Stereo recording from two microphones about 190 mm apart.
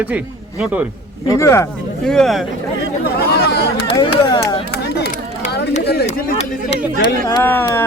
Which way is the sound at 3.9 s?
25° left (ahead or behind).